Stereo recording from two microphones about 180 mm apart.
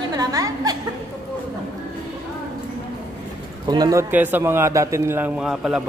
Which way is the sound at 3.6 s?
20° right (ahead or behind).